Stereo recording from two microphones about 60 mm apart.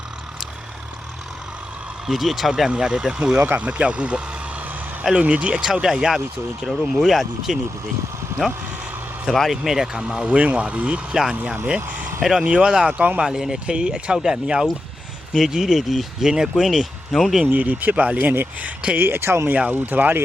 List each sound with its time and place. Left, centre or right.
2.0 s speech: centre
3.3 s speech: right
5.2 s speech: right; by 8.6 s centre
9.2 s speech: centre
9.5 s speech: centre; by 11.0 s right
11.1 s speech: centre
13.2 s speech: centre
17.4 s speech: right
18.9 s speech: right
19.7 s speech: right